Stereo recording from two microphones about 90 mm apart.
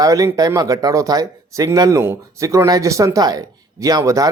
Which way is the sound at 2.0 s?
30° right (ahead or behind).